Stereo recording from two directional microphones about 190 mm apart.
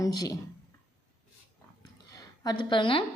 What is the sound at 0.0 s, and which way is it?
Speech, 20° left (ahead or behind).